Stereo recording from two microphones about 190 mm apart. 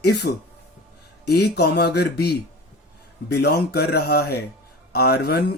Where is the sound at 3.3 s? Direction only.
55° left (ahead or behind).